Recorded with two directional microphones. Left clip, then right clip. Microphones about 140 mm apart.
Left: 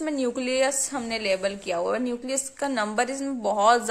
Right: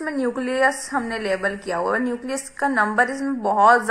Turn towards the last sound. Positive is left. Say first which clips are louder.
# right 5 dB
turn(degrees=30)  # may be behind; listen again after turning